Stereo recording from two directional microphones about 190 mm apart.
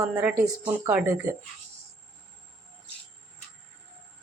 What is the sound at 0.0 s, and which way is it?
Speech, 15° right (ahead or behind).